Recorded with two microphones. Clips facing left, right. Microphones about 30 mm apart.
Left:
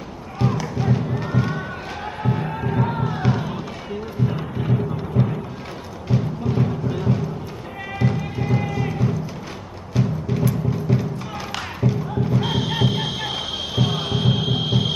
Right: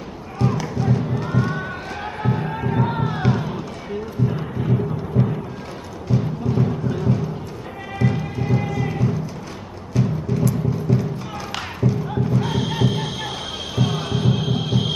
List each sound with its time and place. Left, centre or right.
0.4 s music: centre
3.3 s music: centre
4.3 s thunder: centre
6.0 s music: centre
8.4 s a sound: centre
9.9 s music: centre
13.7 s a sound: centre